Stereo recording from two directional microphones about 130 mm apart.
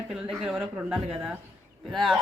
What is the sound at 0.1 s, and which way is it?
Speech, 5° right (ahead or behind).